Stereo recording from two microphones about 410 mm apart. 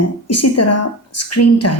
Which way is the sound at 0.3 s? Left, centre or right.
Left.